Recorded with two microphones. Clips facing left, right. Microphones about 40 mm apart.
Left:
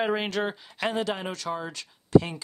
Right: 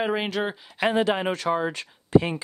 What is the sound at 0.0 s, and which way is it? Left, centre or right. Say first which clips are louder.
Speech: right 1 dB; centre.